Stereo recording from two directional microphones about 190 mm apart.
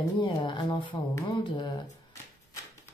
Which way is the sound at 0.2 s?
25° left (ahead or behind).